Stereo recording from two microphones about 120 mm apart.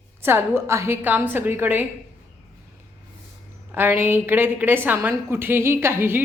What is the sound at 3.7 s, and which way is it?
A woman's voice, 15° right (ahead or behind).